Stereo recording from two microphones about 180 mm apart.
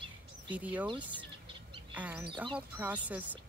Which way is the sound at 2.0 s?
10° right (ahead or behind).